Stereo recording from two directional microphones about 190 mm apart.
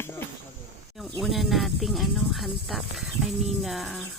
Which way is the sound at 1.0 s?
Centre (ahead or behind).